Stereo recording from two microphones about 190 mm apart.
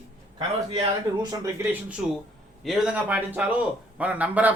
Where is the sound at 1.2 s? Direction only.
20° right (ahead or behind).